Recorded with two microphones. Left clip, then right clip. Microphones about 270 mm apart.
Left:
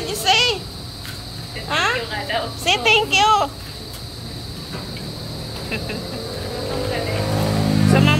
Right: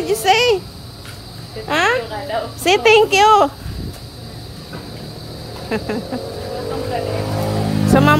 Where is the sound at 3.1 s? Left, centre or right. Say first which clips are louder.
Right 4 dB; right.